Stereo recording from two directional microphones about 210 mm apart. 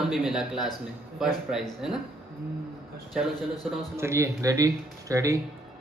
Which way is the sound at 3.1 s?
Centre (ahead or behind).